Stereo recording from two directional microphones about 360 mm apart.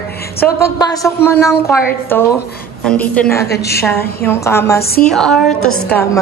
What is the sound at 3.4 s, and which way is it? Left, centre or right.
Speech, left.